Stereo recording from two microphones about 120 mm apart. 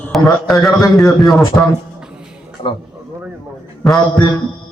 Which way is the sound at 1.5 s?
20° left (ahead or behind).